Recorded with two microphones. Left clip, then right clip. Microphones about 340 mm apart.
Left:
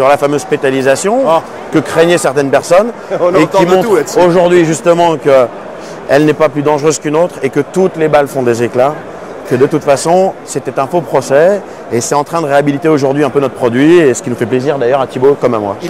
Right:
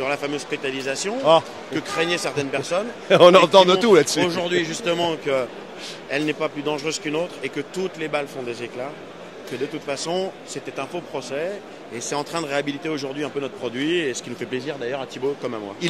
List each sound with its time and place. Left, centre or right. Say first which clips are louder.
0.0 s speech: left 16 dB; left
3.1 s speech: left 2 dB; right
4.2 s speech: left 15 dB; left
9.8 s speech: left 15 dB; left